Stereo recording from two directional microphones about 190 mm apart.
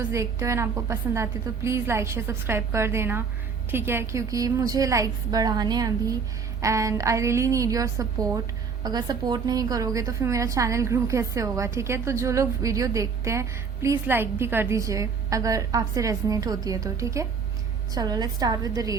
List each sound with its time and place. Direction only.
0.0 s a woman's voice: 15° right (ahead or behind)